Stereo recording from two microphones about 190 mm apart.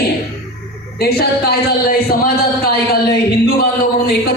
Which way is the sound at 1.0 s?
55° left (ahead or behind).